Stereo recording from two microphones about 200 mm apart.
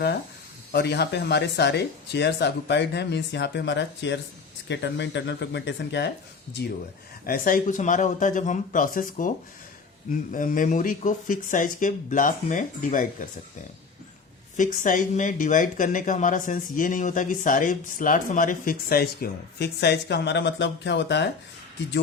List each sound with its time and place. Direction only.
0.7 s speech: 55° left (ahead or behind)
7.3 s speech: 45° left (ahead or behind)
14.5 s speech: 40° left (ahead or behind); by 21.2 s 60° left (ahead or behind)